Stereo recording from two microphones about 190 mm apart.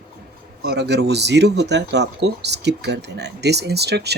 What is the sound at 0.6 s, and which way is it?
Speech, 60° right (ahead or behind).